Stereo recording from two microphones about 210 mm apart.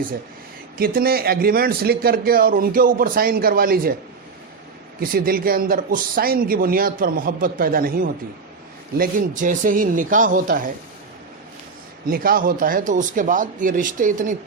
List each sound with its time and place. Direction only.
0.8 s a man's voice: 45° right (ahead or behind)
4.9 s a man's voice: 45° right (ahead or behind)
12.0 s speech: 45° right (ahead or behind)